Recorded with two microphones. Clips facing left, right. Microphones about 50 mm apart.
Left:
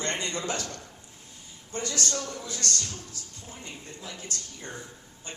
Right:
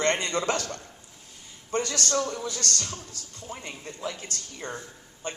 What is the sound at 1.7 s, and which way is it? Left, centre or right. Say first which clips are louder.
Speech: right 4 dB; right.